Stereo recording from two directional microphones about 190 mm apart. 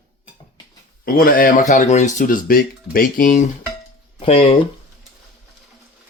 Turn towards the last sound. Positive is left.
turn(degrees=30)  # may be behind; listen again after turning